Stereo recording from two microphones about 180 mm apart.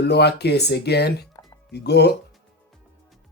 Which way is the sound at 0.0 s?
65° left (ahead or behind).